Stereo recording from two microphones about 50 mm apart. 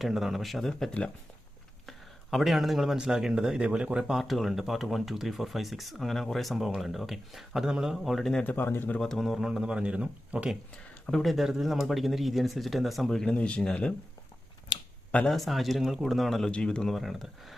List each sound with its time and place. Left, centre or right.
0.0 s speech: centre
1.9 s a sound: centre
3.0 s speech: centre
4.2 s speech: centre
8.0 s speech: centre
8.4 s speech: left
9.0 s speech: centre
9.4 s speech: centre
11.0 s speech: centre
13.3 s speech: left
15.3 s speech: centre
16.5 s speech: centre
16.9 s speech: centre